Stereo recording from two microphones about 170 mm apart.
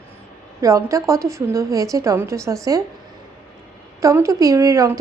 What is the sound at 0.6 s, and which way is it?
A woman's voice, 20° right (ahead or behind).